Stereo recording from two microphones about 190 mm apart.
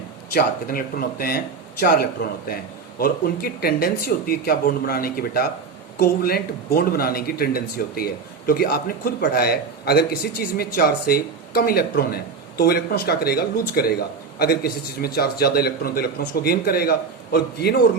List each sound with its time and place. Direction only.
0.3 s speech: 50° left (ahead or behind)